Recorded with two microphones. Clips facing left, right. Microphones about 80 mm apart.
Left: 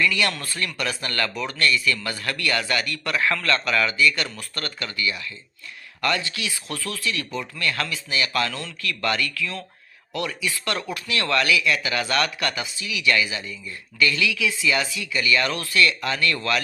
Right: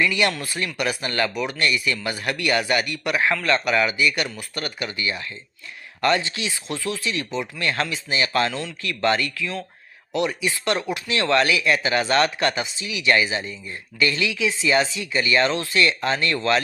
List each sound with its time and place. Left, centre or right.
0.0 s speech: right
5.0 s speech: right